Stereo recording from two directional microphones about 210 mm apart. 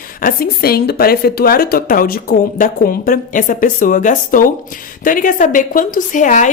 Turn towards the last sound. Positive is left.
turn(degrees=35)  # may be behind; listen again after turning